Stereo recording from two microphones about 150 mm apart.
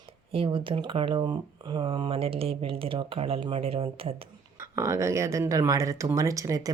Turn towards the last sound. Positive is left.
turn(degrees=-20)  # may be behind; listen again after turning